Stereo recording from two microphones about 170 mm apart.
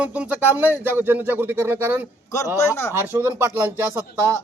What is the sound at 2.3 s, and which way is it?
Speech, 15° left (ahead or behind).